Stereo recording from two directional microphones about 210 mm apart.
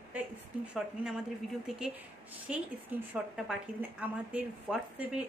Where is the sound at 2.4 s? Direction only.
10° right (ahead or behind).